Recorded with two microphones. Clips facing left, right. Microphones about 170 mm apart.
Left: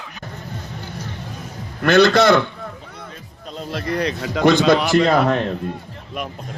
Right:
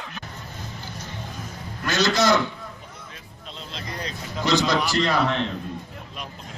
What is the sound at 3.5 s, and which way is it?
Speech, 55° left (ahead or behind).